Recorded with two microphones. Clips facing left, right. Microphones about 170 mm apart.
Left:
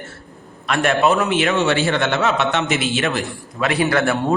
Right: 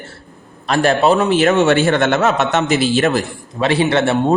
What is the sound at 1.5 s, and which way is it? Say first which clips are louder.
A man's voice: right 5 dB; 50° right (ahead or behind).